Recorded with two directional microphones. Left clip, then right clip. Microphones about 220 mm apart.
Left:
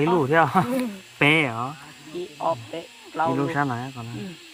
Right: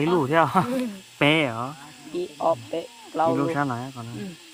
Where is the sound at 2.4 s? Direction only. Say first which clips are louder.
Right 2 dB; 50° right (ahead or behind).